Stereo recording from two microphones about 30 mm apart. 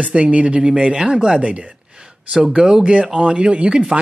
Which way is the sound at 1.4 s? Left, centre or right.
Right.